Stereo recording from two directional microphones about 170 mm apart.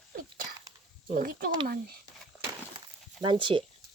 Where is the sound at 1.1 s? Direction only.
55° right (ahead or behind).